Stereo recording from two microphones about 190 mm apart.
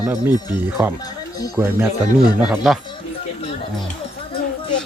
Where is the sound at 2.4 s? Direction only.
Centre (ahead or behind).